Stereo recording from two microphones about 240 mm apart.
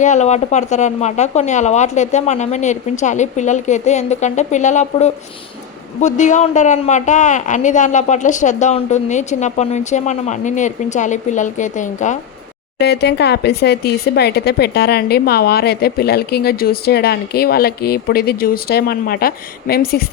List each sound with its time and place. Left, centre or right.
0.0 s a woman's voice: left
12.8 s speech: left